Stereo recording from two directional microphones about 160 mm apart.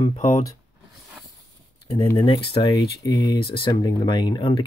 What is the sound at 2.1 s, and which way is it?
Speech, 35° left (ahead or behind).